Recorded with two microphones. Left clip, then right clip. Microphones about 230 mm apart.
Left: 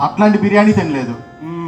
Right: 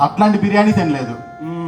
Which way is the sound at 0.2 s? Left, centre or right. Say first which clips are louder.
Left 2 dB; right.